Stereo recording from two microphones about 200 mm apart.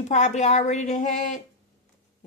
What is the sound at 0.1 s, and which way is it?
Speech, 35° left (ahead or behind).